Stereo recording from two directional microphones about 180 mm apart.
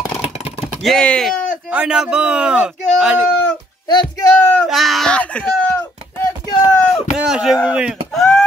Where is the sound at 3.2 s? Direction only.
5° left (ahead or behind).